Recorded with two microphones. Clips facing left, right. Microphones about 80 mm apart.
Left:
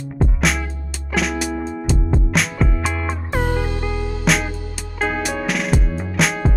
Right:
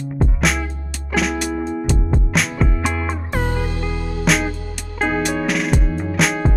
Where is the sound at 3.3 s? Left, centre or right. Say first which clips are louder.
Left 2 dB; left.